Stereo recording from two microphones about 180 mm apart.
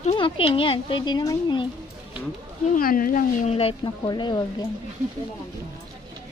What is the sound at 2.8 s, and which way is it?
Speech, 50° left (ahead or behind).